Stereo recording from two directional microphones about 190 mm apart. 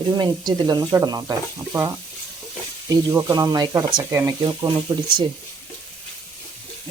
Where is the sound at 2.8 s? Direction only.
20° right (ahead or behind).